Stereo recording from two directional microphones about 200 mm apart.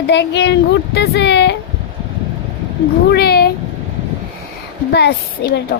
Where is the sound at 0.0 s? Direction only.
60° left (ahead or behind).